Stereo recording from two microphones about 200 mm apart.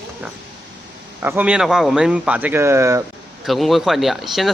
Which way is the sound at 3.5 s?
Centre (ahead or behind).